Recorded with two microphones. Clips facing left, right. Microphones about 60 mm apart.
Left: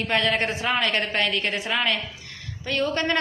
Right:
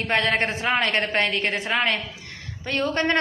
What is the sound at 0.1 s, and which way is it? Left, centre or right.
A man's voice, right.